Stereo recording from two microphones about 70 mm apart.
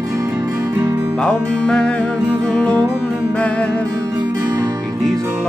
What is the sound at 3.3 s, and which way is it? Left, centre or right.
Music, centre.